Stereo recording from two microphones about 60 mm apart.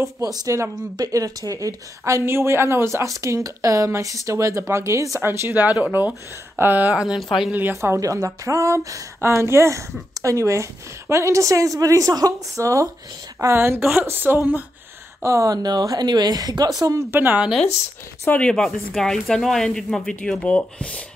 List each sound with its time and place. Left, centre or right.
0.2 s a woman's voice: right
5.2 s speech: right
5.5 s speech: right
7.2 s speech: centre
7.7 s speech: right
9.2 s speech: right
13.6 s speech: right
15.2 s a woman's voice: right
17.1 s speech: right
18.5 s speech: centre
20.3 s speech: centre